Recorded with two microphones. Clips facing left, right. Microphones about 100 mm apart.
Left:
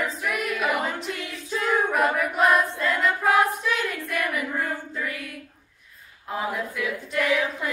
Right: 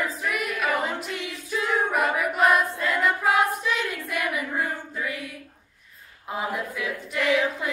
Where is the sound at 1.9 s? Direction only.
Centre (ahead or behind).